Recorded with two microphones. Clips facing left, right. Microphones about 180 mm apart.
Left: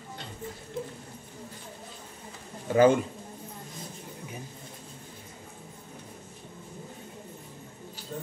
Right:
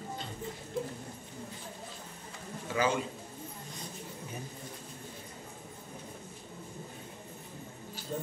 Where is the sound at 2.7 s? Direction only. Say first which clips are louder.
Left 10 dB; 50° left (ahead or behind).